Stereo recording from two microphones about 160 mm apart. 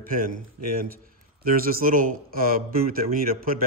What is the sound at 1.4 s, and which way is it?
Speech, 65° right (ahead or behind).